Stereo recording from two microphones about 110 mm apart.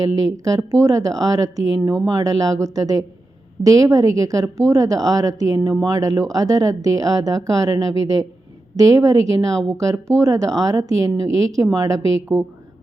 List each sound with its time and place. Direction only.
0.0 s speech: 30° right (ahead or behind)